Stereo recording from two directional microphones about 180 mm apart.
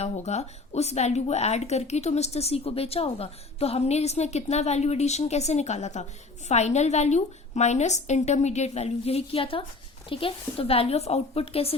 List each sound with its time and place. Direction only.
0.0 s a woman's voice: 35° left (ahead or behind)